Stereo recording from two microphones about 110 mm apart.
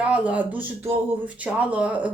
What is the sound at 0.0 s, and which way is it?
Speech, 10° right (ahead or behind).